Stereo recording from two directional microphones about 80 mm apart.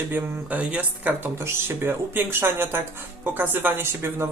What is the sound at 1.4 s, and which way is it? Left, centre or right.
Speech, right.